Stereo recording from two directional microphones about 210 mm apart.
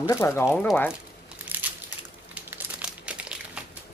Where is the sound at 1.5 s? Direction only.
10° right (ahead or behind).